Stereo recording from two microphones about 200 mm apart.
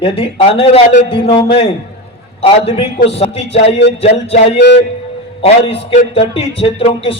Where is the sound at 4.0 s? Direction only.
30° left (ahead or behind).